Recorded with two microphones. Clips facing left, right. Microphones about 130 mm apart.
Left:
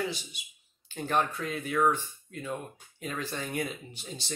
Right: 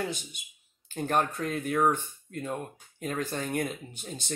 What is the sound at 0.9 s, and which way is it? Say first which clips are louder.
Speech: right 1 dB; 50° right (ahead or behind).